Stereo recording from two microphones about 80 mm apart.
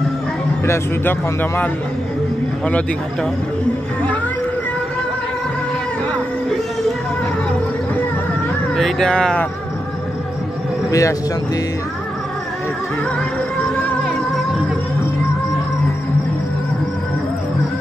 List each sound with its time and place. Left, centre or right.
0.7 s speech: left
8.7 s speech: centre
10.9 s speech: left